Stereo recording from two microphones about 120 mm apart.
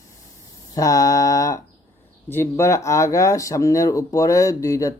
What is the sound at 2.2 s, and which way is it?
Speech, 20° left (ahead or behind).